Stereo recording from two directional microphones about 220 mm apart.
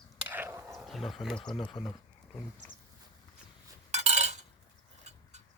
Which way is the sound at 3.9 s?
30° right (ahead or behind).